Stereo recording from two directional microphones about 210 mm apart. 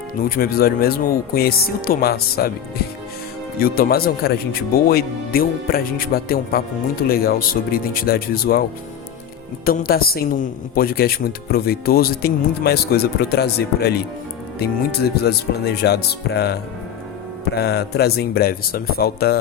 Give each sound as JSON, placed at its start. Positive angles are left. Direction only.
{"t": 0.3, "sound": "a woman's voice", "side_deg": 45}
{"t": 3.6, "sound": "a woman's voice", "side_deg": 45}
{"t": 9.6, "sound": "a woman's voice", "side_deg": 45}